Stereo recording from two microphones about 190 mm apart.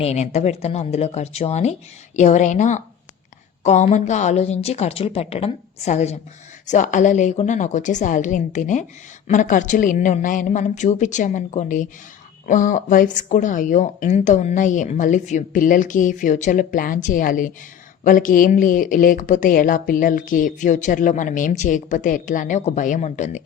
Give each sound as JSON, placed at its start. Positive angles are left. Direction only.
{"t": 0.0, "sound": "a woman's voice", "side_deg": 35}